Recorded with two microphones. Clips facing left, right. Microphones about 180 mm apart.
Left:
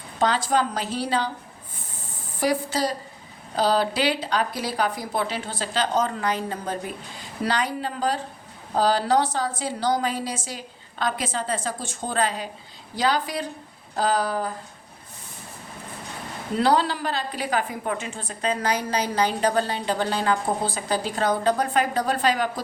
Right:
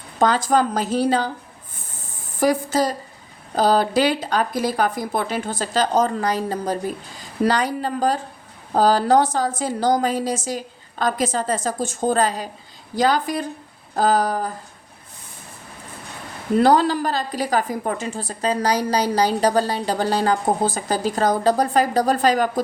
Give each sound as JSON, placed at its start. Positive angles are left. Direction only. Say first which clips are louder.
{"t": 0.2, "sound": "a woman's voice", "louder": "right 4 dB", "side_deg": -45}
{"t": 2.4, "sound": "a woman's voice", "louder": "right 5 dB", "side_deg": -45}
{"t": 16.6, "sound": "a woman's voice", "louder": "right 5 dB", "side_deg": -45}